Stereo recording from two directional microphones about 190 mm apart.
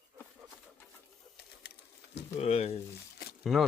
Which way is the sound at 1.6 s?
55° left (ahead or behind).